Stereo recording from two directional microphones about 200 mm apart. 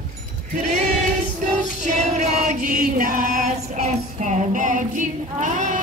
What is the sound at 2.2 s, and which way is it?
Chant, 35° right (ahead or behind).